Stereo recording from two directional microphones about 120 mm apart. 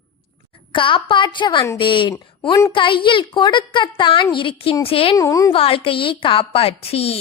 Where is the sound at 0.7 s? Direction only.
45° left (ahead or behind).